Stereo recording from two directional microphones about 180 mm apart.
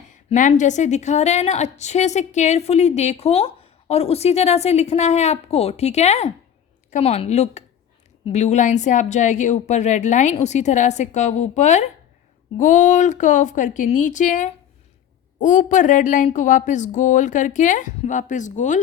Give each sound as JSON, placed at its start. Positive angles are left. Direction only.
{"t": 0.1, "sound": "a woman's voice", "side_deg": 45}